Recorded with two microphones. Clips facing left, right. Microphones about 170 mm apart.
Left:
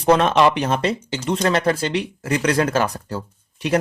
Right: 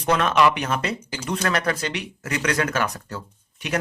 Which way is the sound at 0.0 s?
30° left (ahead or behind).